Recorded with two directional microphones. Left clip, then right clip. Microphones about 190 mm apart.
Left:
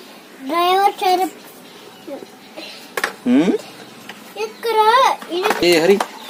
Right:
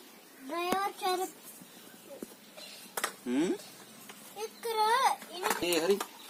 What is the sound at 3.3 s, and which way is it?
Speech, 30° left (ahead or behind).